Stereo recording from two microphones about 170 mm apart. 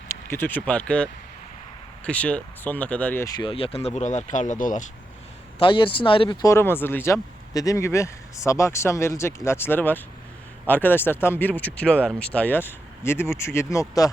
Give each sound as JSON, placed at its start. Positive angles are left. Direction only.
{"t": 0.1, "sound": "speech", "side_deg": 15}
{"t": 3.2, "sound": "speech", "side_deg": 25}
{"t": 5.5, "sound": "speech", "side_deg": 30}
{"t": 6.4, "sound": "speech", "side_deg": 15}